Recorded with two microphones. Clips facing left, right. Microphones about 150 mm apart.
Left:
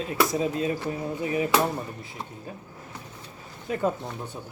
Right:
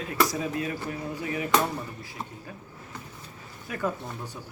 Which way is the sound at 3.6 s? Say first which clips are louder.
Left 4 dB; 25° left (ahead or behind).